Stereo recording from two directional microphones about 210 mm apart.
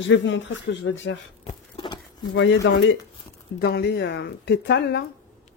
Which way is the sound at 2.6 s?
60° left (ahead or behind).